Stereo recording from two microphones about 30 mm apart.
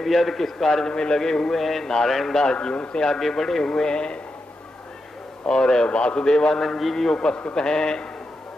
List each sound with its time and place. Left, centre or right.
0.0 s a man's voice: centre
0.8 s speech: left
1.5 s a man's voice: centre
2.3 s a man's voice: left
3.2 s a man's voice: centre
3.7 s speech: left
5.5 s speech: left
6.5 s a man's voice: centre
7.1 s speech: left